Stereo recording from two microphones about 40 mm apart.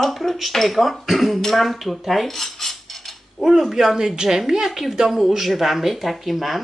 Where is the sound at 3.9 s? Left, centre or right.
Centre.